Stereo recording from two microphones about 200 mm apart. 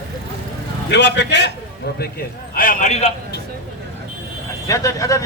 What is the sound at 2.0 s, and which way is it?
A man's voice, 50° left (ahead or behind).